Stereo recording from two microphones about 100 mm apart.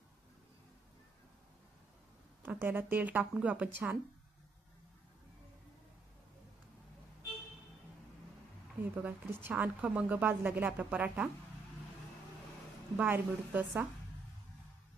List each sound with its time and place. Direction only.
2.4 s a woman's voice: 20° right (ahead or behind)
8.8 s a woman's voice: 15° right (ahead or behind)
13.0 s a woman's voice: 20° right (ahead or behind)